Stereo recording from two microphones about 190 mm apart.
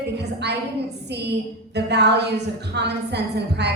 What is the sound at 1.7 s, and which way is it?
A woman's voice, 65° right (ahead or behind).